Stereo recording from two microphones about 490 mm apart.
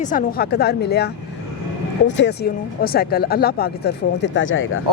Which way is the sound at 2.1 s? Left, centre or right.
Left.